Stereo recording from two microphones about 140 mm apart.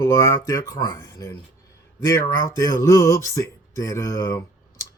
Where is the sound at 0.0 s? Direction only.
25° left (ahead or behind).